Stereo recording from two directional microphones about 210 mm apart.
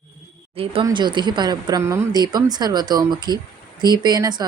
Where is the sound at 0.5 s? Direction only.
25° right (ahead or behind).